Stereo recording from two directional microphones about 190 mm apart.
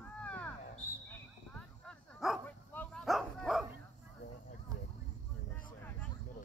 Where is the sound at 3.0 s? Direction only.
Centre (ahead or behind).